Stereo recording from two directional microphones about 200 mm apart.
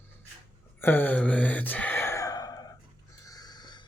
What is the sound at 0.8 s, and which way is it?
Gasp, 10° left (ahead or behind).